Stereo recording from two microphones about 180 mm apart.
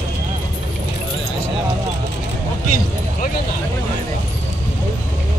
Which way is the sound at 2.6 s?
45° left (ahead or behind).